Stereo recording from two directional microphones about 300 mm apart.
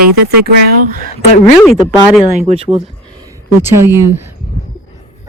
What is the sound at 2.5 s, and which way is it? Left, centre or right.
Speech, centre.